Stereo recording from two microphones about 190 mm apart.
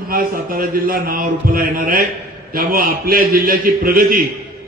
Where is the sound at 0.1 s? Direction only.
50° right (ahead or behind).